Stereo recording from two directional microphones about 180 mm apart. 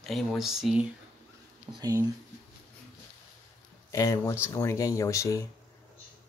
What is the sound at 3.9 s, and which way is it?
Speech, 15° left (ahead or behind).